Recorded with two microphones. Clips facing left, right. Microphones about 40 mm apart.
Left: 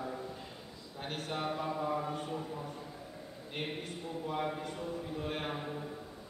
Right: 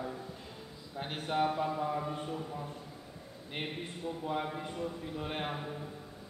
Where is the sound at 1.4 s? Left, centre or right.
Centre.